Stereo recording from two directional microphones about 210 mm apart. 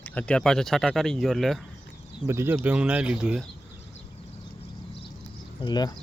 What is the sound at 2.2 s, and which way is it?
Speech, 10° right (ahead or behind).